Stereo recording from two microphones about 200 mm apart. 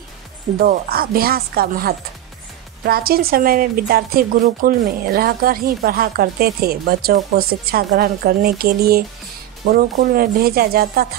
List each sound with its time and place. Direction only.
0.6 s speech: 45° right (ahead or behind)